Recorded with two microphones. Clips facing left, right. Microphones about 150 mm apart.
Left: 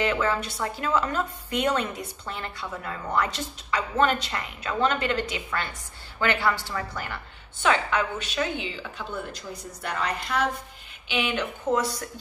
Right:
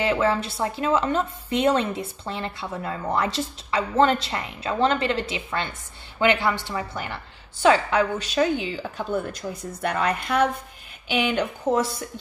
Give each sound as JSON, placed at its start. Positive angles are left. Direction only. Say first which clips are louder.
{"t": 0.0, "sound": "a woman's voice", "louder": "right 3 dB", "side_deg": -30}
{"t": 7.6, "sound": "a woman's voice", "louder": "right 5 dB", "side_deg": -35}
{"t": 11.1, "sound": "speech", "louder": "right 4 dB", "side_deg": -40}